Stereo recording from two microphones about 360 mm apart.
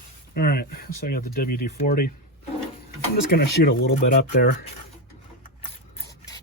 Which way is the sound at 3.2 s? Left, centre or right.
Left.